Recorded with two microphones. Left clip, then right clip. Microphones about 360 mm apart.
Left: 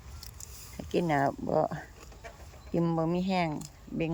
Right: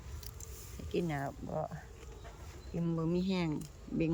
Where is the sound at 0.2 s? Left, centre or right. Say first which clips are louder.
Left 5 dB; centre.